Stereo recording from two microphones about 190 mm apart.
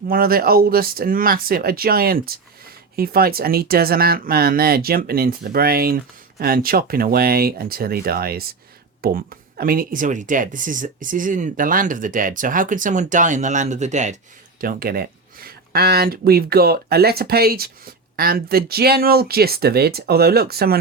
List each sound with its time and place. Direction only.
0.1 s speech: 50° right (ahead or behind)
14.6 s speech: 50° right (ahead or behind)